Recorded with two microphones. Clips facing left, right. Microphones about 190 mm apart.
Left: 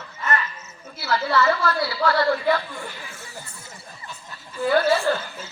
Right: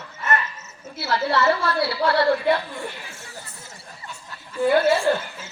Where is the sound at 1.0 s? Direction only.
30° right (ahead or behind).